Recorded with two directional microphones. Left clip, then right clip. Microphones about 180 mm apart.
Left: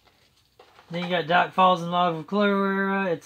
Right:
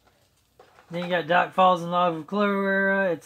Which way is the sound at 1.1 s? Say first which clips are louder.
Even; 30° left (ahead or behind).